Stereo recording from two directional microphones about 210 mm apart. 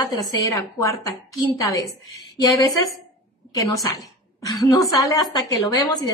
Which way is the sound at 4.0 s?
15° left (ahead or behind).